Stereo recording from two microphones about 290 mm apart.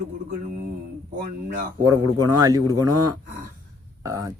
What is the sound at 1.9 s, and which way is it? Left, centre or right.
A man's voice, centre.